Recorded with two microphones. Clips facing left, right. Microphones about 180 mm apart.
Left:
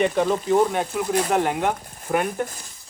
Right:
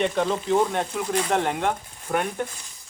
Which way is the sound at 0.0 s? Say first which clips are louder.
Left 3 dB; 5° left (ahead or behind).